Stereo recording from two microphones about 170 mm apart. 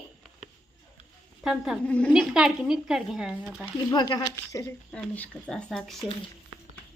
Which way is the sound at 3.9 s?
25° left (ahead or behind).